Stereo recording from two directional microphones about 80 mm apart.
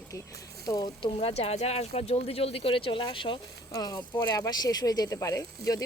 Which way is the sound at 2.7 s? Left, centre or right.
Left.